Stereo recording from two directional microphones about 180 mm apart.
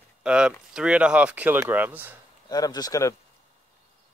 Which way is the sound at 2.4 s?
20° left (ahead or behind).